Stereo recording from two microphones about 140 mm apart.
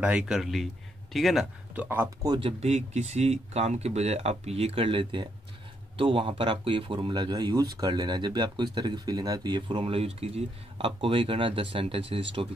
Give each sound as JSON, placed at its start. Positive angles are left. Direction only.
{"t": 0.0, "sound": "speech", "side_deg": -10}
{"t": 2.2, "sound": "speech", "side_deg": -30}
{"t": 2.6, "sound": "speech", "side_deg": -50}